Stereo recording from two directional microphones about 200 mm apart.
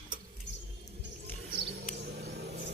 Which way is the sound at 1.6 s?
55° right (ahead or behind).